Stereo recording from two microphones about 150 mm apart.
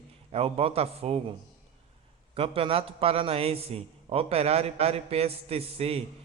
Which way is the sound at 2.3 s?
40° right (ahead or behind).